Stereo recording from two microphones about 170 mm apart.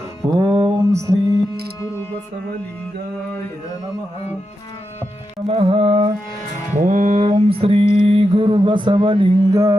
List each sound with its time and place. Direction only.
0.3 s mantra: 25° right (ahead or behind)
5.5 s mantra: 30° right (ahead or behind)
6.7 s a sound: 45° right (ahead or behind); by 9.7 s 20° right (ahead or behind)